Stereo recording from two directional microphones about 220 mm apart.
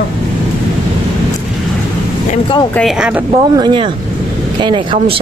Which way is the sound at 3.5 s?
20° right (ahead or behind).